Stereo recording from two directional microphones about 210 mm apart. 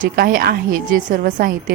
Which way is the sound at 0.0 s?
40° right (ahead or behind).